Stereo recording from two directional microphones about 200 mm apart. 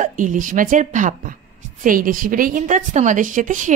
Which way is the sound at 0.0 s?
40° right (ahead or behind).